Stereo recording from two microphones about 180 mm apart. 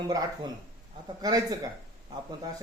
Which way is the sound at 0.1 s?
20° right (ahead or behind).